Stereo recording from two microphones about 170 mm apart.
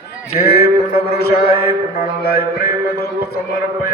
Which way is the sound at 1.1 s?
65° left (ahead or behind).